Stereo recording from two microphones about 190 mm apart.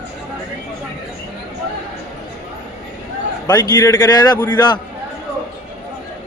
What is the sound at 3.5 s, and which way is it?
A man's voice, 20° left (ahead or behind).